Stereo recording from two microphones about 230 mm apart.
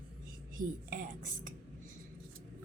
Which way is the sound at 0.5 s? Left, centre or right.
Right.